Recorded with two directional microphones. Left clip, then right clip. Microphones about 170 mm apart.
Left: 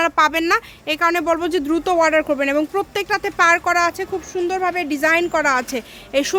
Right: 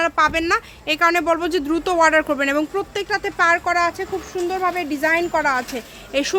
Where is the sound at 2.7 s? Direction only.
30° left (ahead or behind).